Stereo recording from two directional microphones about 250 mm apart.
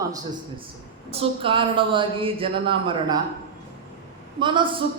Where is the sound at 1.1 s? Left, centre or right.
Right.